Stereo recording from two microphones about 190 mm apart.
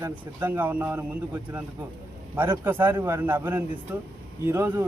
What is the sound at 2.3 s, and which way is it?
Speech, 10° right (ahead or behind).